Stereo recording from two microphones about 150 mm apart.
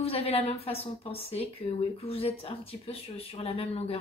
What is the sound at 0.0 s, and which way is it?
A woman's voice, 40° left (ahead or behind).